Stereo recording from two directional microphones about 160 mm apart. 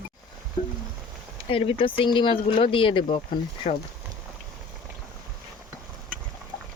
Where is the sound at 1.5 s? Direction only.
35° left (ahead or behind).